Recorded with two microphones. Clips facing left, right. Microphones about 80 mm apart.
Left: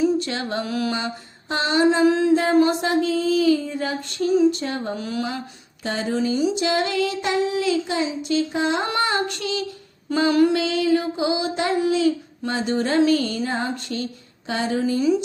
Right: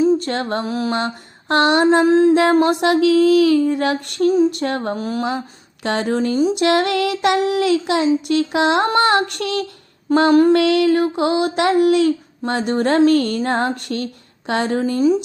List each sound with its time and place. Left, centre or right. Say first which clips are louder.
0.2 s a sound: right 4 dB; right
0.6 s mantra: right 3 dB; right
0.9 s child singing: right 5 dB; right
2.0 s mantra: right 6 dB; right
2.3 s child singing: right 3 dB; right
4.9 s mantra: right 4 dB; right
5.8 s child singing: right 4 dB; right
6.5 s child singing: right 6 dB; right
10.1 s mantra: right 7 dB; right
10.5 s child singing: right 6 dB; right